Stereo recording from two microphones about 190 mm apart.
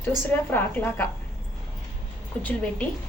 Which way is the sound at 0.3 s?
10° left (ahead or behind).